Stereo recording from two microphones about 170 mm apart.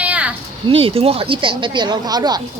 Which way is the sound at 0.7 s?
35° right (ahead or behind).